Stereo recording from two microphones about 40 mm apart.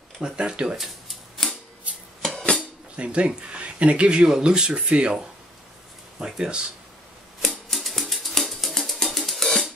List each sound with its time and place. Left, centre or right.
0.2 s speech: right
0.7 s typewriter: centre
1.9 s a sound: right
2.3 s a sound: left
3.0 s speech: right
4.3 s speech: centre
6.1 s speech: centre
7.4 s music: centre